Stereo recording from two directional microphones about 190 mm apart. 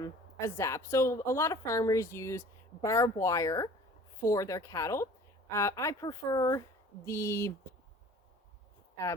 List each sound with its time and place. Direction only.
0.0 s speech: 15° left (ahead or behind)